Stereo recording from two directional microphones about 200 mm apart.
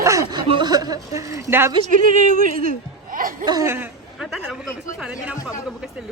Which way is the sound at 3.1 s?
45° right (ahead or behind).